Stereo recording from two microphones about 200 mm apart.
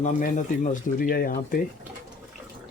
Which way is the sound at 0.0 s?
40° left (ahead or behind).